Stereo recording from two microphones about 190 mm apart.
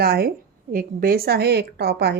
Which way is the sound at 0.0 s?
55° right (ahead or behind).